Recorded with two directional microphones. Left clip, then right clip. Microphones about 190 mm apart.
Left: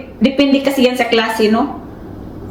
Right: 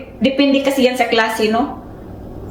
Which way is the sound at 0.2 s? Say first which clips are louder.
Left 1 dB; 15° right (ahead or behind).